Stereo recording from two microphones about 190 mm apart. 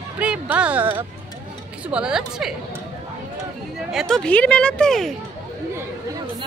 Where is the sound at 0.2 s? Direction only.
5° right (ahead or behind).